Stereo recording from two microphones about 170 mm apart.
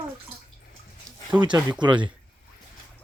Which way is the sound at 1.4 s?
25° right (ahead or behind).